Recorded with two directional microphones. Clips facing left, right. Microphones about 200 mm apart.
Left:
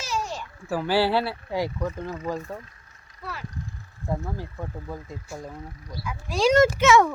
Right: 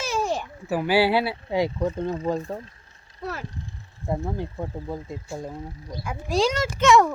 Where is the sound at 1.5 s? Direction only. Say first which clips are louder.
Right 4 dB; 20° right (ahead or behind).